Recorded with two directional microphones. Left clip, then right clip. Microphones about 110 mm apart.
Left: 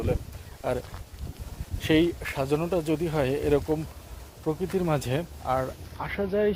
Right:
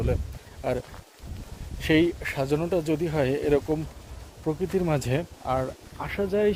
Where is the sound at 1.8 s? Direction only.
10° right (ahead or behind).